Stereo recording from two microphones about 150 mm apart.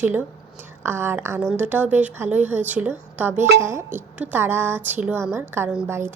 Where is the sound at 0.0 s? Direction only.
10° right (ahead or behind).